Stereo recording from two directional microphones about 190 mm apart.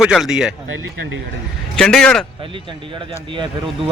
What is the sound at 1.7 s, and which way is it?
Speech, 5° left (ahead or behind).